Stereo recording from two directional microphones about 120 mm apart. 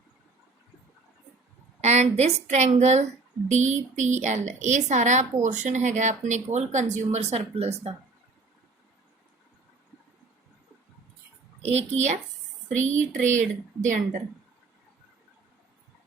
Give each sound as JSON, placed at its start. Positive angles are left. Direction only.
{"t": 1.8, "sound": "a woman's voice", "side_deg": -70}
{"t": 11.6, "sound": "speech", "side_deg": -60}
{"t": 12.6, "sound": "a woman's voice", "side_deg": -85}